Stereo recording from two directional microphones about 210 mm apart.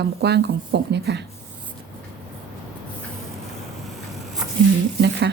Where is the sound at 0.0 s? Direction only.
50° right (ahead or behind).